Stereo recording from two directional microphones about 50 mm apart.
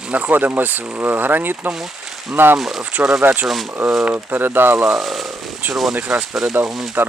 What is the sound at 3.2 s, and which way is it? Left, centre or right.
Speech, right.